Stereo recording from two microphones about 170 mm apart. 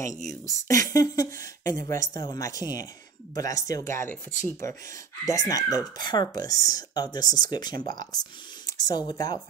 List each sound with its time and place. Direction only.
0.5 s speech: 20° left (ahead or behind)